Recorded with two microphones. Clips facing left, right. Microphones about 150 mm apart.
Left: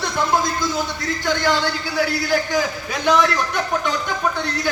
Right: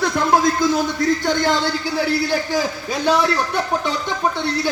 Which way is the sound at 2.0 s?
30° right (ahead or behind).